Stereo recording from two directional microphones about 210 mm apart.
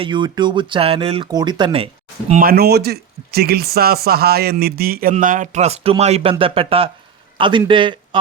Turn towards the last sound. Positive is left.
turn(degrees=-20)  # may be behind; listen again after turning